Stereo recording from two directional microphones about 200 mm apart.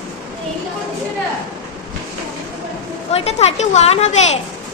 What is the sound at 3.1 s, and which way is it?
A woman's voice, 30° left (ahead or behind).